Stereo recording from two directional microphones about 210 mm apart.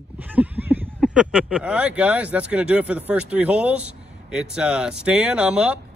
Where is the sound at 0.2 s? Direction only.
10° right (ahead or behind).